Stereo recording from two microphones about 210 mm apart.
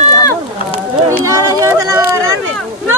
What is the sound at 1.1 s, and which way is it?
Speech, 15° right (ahead or behind).